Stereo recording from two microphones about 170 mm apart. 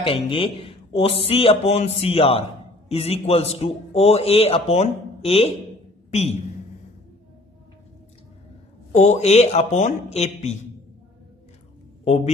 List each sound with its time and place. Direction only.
0.0 s a man's voice: 30° left (ahead or behind)
9.0 s a man's voice: 40° left (ahead or behind)